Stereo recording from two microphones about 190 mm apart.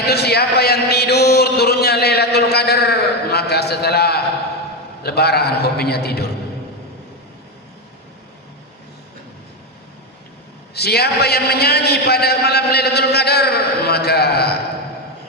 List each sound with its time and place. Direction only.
0.0 s a sound: 55° left (ahead or behind)
5.0 s a man's voice: 55° left (ahead or behind)
10.8 s a man's voice: 60° left (ahead or behind)